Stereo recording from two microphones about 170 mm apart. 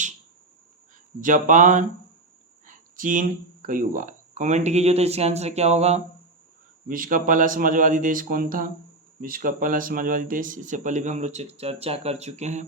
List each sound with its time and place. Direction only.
1.2 s speech: 50° right (ahead or behind)
6.8 s speech: 55° right (ahead or behind)